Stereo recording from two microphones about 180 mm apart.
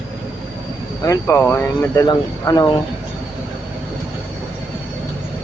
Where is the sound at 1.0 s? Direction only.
15° left (ahead or behind).